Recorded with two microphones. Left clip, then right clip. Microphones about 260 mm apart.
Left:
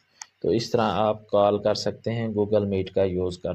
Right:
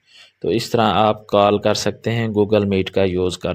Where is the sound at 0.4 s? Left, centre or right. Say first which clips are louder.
Right 5 dB; right.